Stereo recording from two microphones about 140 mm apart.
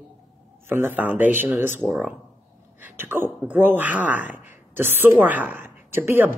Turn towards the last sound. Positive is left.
turn(degrees=-15)  # may be behind; listen again after turning